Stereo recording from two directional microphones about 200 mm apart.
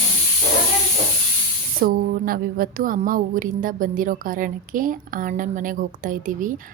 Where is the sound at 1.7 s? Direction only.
45° right (ahead or behind).